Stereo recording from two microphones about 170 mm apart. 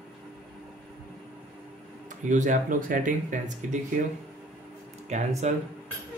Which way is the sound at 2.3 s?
50° right (ahead or behind).